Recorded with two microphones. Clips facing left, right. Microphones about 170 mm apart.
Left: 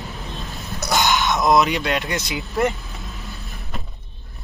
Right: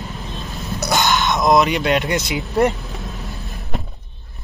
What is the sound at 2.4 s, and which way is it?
Vehicle, 35° right (ahead or behind).